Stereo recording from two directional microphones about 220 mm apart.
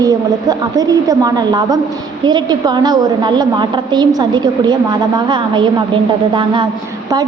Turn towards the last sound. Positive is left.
turn(degrees=-20)  # may be behind; listen again after turning